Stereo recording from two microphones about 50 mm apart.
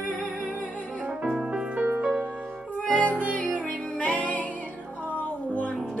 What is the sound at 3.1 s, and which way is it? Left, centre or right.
Music, right.